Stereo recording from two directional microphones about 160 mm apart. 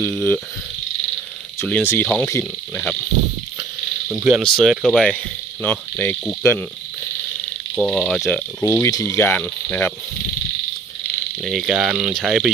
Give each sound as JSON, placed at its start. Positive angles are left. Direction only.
{"t": 1.6, "sound": "cricket", "side_deg": 10}
{"t": 4.1, "sound": "speech", "side_deg": -10}
{"t": 4.4, "sound": "speech", "side_deg": 0}
{"t": 5.6, "sound": "cricket", "side_deg": 15}
{"t": 7.8, "sound": "speech", "side_deg": 0}
{"t": 8.6, "sound": "cricket", "side_deg": 20}
{"t": 11.4, "sound": "speech", "side_deg": 0}